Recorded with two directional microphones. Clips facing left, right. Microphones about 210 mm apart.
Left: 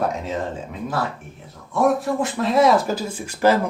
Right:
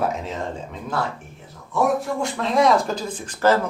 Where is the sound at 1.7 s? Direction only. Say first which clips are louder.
Left 2 dB; centre (ahead or behind).